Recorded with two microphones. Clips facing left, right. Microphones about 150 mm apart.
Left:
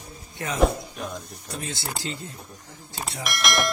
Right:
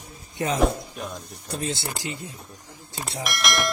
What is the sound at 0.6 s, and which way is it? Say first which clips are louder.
Speech: left 1 dB; centre (ahead or behind).